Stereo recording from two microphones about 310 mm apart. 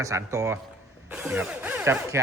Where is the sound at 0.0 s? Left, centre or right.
Centre.